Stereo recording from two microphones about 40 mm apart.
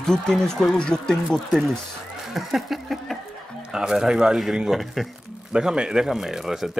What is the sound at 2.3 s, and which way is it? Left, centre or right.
Speech, centre.